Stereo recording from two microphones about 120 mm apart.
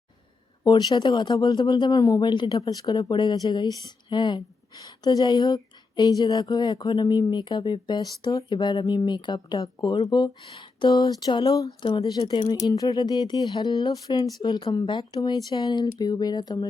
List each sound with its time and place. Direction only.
0.6 s speech: 35° left (ahead or behind)
10.5 s a sound: 45° left (ahead or behind)
10.8 s speech: 35° left (ahead or behind)